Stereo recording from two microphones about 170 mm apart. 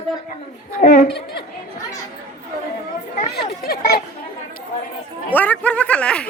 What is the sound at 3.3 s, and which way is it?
Speech, 70° left (ahead or behind).